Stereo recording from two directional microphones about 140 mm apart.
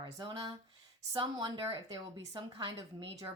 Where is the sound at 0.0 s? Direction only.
25° right (ahead or behind).